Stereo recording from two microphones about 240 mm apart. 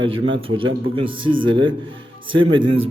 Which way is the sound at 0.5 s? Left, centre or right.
Right.